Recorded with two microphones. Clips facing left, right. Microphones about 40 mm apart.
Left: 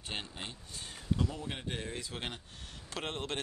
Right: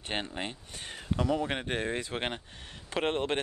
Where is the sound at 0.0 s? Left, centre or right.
Right.